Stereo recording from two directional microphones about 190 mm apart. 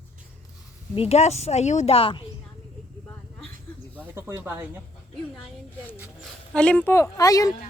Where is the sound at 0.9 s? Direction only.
30° left (ahead or behind).